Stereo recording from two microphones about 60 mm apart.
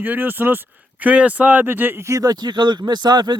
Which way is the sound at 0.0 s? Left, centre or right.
Right.